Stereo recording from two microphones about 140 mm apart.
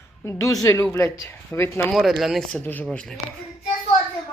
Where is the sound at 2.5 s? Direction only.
10° left (ahead or behind).